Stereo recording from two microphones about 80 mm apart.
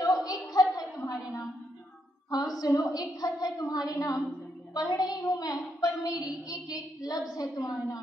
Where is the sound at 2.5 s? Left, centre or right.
Left.